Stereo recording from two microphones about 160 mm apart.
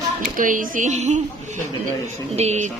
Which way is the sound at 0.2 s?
55° right (ahead or behind).